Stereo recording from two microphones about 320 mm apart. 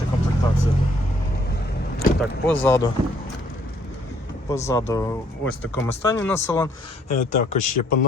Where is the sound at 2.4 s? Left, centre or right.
Centre.